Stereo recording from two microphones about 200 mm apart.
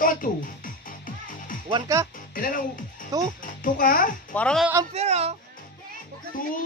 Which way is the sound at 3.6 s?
45° left (ahead or behind).